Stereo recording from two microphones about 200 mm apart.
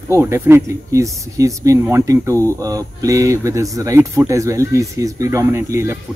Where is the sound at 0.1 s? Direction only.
10° right (ahead or behind).